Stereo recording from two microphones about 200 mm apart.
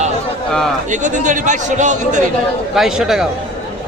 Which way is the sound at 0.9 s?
40° right (ahead or behind).